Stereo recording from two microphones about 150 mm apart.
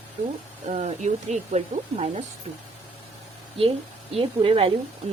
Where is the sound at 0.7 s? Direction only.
45° right (ahead or behind).